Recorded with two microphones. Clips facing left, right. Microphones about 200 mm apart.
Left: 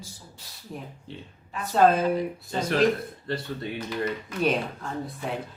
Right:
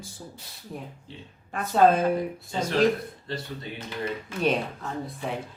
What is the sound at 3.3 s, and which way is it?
Speech, 60° left (ahead or behind).